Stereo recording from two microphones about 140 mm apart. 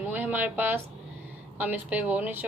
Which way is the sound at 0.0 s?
15° right (ahead or behind).